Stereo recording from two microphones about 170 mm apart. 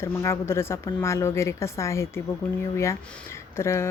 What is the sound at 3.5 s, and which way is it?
Speech, 15° left (ahead or behind).